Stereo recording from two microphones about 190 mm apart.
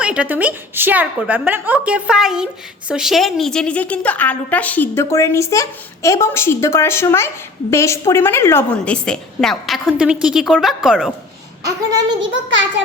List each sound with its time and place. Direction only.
0.0 s a woman's voice: 5° right (ahead or behind)
12.3 s a child's voice: 75° right (ahead or behind)